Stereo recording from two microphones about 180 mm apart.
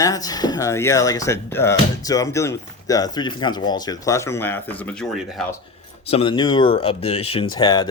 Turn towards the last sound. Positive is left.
turn(degrees=25)  # may be behind; listen again after turning